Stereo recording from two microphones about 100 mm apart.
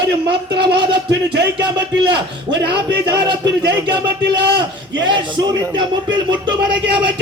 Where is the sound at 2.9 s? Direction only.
50° right (ahead or behind).